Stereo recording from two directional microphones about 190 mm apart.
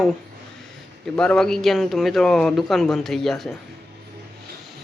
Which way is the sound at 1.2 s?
5° left (ahead or behind).